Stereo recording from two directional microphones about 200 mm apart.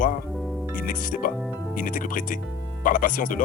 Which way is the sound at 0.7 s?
40° left (ahead or behind).